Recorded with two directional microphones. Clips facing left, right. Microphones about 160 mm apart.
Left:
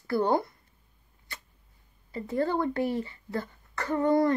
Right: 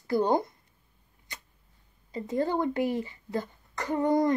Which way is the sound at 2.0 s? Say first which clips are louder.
Even; 20° right (ahead or behind).